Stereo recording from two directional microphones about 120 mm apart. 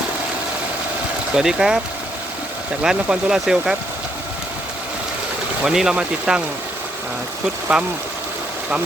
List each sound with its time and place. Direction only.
1.3 s speech: 5° right (ahead or behind)
2.8 s speech: 5° right (ahead or behind)
5.6 s speech: 5° right (ahead or behind)
7.7 s speech: 5° right (ahead or behind)